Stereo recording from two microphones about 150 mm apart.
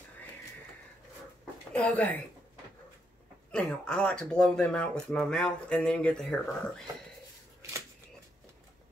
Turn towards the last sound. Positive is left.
turn(degrees=-20)  # may be behind; listen again after turning